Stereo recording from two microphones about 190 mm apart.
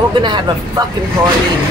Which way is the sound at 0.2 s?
25° right (ahead or behind).